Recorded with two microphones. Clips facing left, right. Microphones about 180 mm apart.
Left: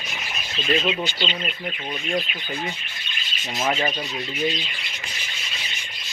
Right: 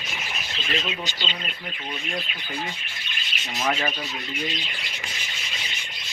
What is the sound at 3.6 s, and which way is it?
Speech, 25° left (ahead or behind).